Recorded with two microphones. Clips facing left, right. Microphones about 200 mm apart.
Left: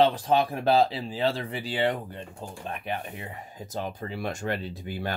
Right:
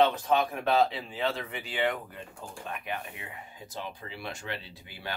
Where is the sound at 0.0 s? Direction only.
35° left (ahead or behind).